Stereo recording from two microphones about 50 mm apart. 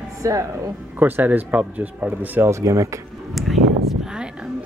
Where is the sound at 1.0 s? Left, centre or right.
Right.